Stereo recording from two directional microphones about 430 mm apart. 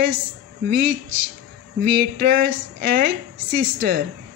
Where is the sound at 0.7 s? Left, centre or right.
Right.